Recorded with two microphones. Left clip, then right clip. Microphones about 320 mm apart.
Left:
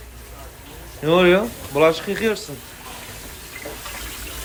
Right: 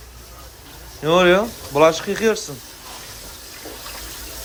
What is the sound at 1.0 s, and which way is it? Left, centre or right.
Speech, centre.